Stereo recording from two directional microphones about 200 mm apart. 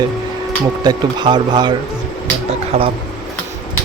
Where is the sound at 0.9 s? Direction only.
20° right (ahead or behind).